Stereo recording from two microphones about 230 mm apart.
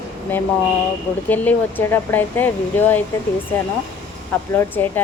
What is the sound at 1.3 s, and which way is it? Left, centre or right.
A woman's voice, centre.